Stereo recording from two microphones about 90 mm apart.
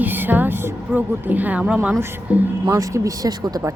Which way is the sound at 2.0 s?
25° right (ahead or behind).